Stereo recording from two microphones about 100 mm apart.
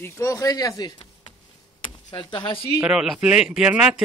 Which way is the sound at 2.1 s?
55° left (ahead or behind).